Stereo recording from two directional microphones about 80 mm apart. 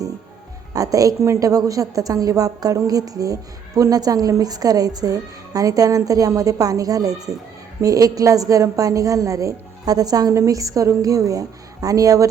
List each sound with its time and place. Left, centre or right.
0.7 s a woman's voice: right